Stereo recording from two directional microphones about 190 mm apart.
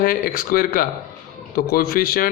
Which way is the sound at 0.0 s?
45° left (ahead or behind).